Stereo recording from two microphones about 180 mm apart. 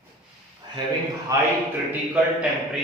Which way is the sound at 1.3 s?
20° right (ahead or behind).